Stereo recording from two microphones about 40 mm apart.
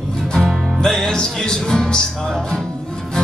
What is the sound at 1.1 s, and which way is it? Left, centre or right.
Music, centre.